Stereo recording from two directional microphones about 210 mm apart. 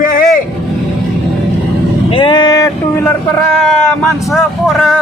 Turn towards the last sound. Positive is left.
turn(degrees=0)  # may be behind; listen again after turning